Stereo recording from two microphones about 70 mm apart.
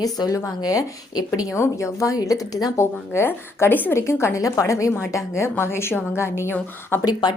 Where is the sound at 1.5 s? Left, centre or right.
Left.